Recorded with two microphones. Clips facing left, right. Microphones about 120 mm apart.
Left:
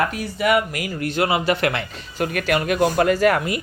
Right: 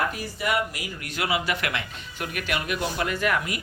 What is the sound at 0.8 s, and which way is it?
Speech, 35° left (ahead or behind).